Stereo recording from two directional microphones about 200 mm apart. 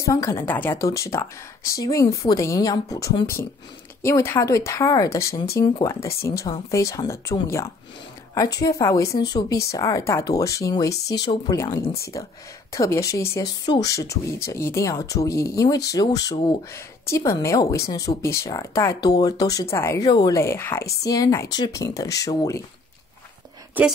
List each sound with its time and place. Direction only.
0.0 s speech: 15° left (ahead or behind)